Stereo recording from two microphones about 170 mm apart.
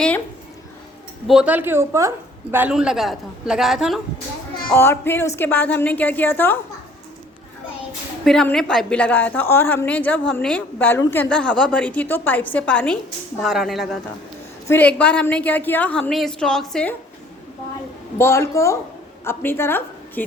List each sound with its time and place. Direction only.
1.3 s a woman's voice: 5° right (ahead or behind)
4.7 s a woman's voice: 15° left (ahead or behind)
8.2 s a woman's voice: 5° left (ahead or behind)
18.2 s a woman's voice: 15° left (ahead or behind)